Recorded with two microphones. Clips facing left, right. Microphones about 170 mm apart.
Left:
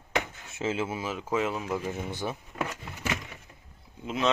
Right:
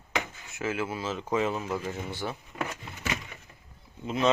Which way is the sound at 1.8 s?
20° left (ahead or behind).